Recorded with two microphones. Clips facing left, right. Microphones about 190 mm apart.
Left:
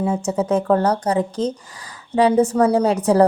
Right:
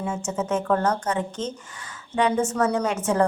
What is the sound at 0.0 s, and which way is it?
A woman's voice, 35° left (ahead or behind).